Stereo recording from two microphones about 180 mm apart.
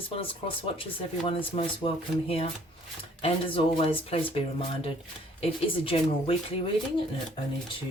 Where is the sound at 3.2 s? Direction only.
30° left (ahead or behind).